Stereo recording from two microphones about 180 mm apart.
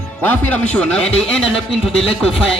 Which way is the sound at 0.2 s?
10° left (ahead or behind).